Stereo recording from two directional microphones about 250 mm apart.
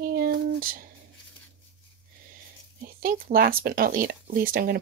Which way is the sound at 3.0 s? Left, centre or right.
Right.